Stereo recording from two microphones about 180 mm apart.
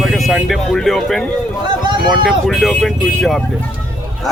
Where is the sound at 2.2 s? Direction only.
Centre (ahead or behind).